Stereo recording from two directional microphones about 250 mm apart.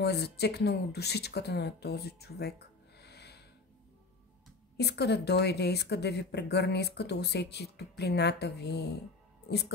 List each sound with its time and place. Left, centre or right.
0.0 s speech: left
3.0 s music: left
4.7 s speech: left